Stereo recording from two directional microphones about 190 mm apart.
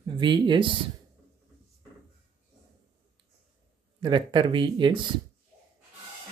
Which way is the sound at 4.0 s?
25° right (ahead or behind).